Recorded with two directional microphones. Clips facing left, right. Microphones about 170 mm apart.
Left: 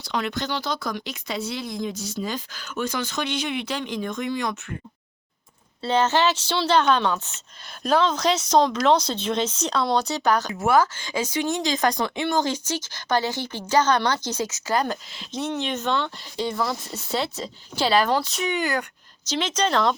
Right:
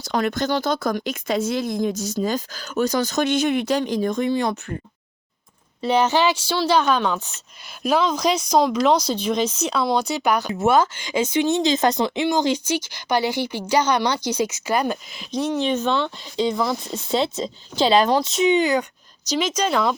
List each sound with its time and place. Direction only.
0.0 s speech: 45° right (ahead or behind)
5.8 s speech: 15° right (ahead or behind)
10.5 s speech: 25° right (ahead or behind)
19.3 s speech: 10° right (ahead or behind)